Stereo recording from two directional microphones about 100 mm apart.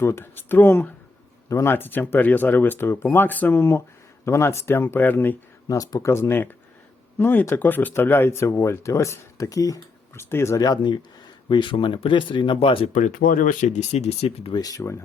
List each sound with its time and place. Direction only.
0.0 s speech: 25° left (ahead or behind)
5.6 s speech: 35° left (ahead or behind)
10.6 s speech: 45° left (ahead or behind)
11.4 s speech: 55° left (ahead or behind)
12.5 s speech: 65° left (ahead or behind)
13.9 s speech: 90° left
14.5 s speech: 40° left (ahead or behind)